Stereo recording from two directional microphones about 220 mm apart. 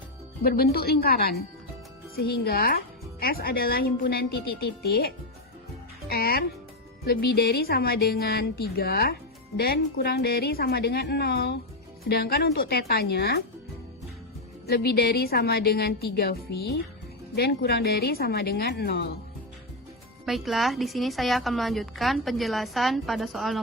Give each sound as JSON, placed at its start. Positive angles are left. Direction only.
{"t": 0.4, "sound": "speech", "side_deg": 45}
{"t": 14.7, "sound": "speech", "side_deg": 45}
{"t": 20.2, "sound": "a woman's voice", "side_deg": 0}